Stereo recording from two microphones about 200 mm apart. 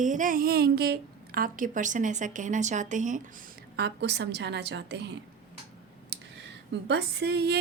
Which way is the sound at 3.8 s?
55° right (ahead or behind).